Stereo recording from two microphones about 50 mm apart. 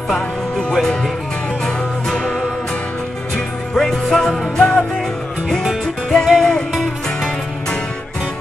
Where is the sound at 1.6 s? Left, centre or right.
Left.